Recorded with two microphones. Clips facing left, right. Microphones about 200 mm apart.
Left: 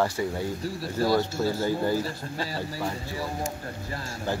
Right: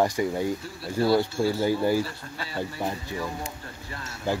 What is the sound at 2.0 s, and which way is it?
Speech, 40° left (ahead or behind).